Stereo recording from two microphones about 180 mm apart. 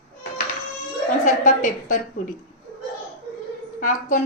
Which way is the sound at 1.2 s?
45° left (ahead or behind).